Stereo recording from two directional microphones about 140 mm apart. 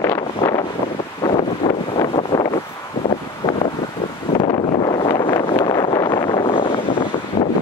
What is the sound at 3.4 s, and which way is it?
Wind, 25° left (ahead or behind).